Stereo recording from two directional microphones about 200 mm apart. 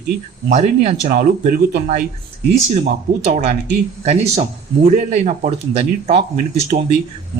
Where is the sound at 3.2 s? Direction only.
35° right (ahead or behind).